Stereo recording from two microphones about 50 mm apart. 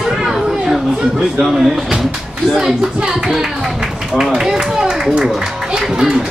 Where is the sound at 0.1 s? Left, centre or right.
Centre.